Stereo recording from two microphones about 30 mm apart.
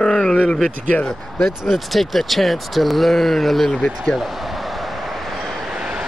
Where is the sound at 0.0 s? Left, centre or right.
Left.